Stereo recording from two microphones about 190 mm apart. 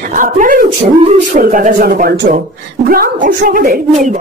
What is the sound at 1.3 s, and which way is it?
Speech, 45° right (ahead or behind).